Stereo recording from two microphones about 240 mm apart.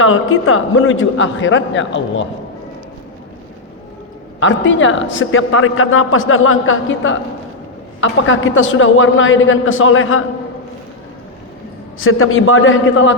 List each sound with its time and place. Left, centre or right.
0.0 s a man's voice: left
4.4 s a man's voice: left
11.9 s a man's voice: left